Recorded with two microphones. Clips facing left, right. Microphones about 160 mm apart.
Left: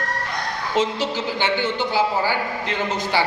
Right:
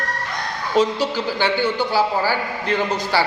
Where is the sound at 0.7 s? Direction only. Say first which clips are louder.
Right 4 dB; 20° left (ahead or behind).